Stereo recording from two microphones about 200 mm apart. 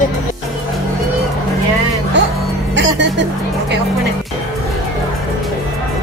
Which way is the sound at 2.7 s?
60° right (ahead or behind).